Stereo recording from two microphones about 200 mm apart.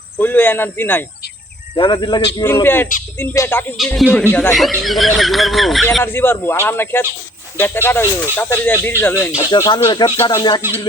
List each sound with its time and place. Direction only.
0.2 s speech: 10° left (ahead or behind)
1.7 s speech: 25° left (ahead or behind)
3.8 s speech: centre (ahead or behind)
6.0 s speech: 10° left (ahead or behind)
9.6 s speech: 20° left (ahead or behind)